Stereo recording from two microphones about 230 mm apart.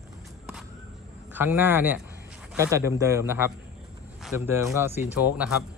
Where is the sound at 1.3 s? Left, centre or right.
Centre.